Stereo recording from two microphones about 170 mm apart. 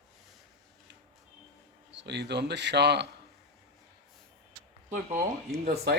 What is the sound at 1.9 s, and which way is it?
A man's voice, 90° right.